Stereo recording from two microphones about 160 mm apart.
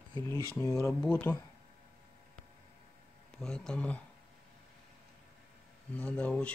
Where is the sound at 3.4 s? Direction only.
5° left (ahead or behind).